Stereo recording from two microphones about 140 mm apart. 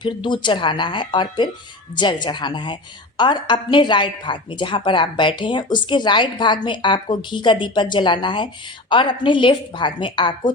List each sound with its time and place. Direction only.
0.0 s a woman's voice: 35° left (ahead or behind)